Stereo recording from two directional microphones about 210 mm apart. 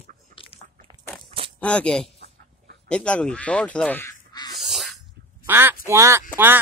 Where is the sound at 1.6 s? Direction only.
5° left (ahead or behind).